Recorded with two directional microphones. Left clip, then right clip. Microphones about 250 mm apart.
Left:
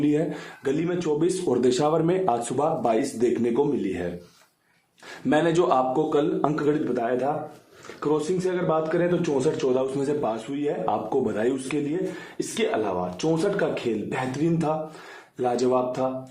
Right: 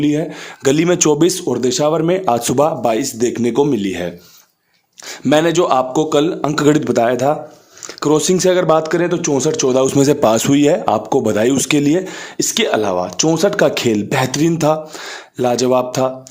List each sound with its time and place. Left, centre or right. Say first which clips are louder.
0.0 s a man's voice: right 6 dB; right
0.7 s speech: right 12 dB; right
1.5 s a man's voice: right 6 dB; right
5.3 s a man's voice: right 8 dB; right